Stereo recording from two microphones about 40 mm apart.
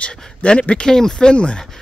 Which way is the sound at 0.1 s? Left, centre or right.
Left.